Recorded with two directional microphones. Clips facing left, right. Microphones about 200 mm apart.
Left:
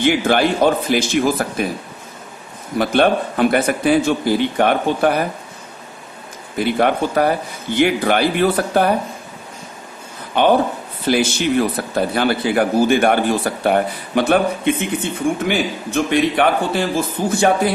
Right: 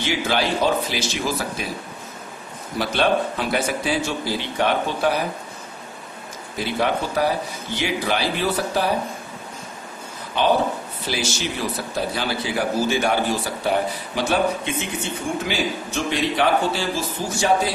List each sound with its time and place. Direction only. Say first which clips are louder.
0.0 s speech: left 7 dB; 55° left (ahead or behind)
2.8 s a man's voice: left 5 dB; 55° left (ahead or behind)
6.6 s a man's voice: left 6 dB; 55° left (ahead or behind)
10.4 s a man's voice: left 5 dB; 60° left (ahead or behind)